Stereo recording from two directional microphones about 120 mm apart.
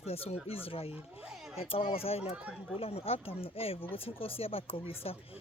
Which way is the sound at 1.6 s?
50° left (ahead or behind).